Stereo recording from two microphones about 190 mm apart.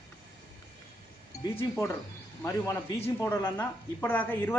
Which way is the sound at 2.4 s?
15° left (ahead or behind).